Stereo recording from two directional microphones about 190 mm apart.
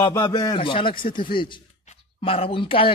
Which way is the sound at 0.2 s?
25° left (ahead or behind).